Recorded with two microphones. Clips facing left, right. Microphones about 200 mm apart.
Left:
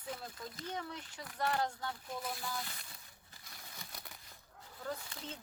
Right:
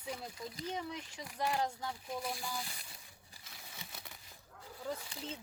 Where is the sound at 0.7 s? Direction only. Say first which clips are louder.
Right 2 dB; 5° right (ahead or behind).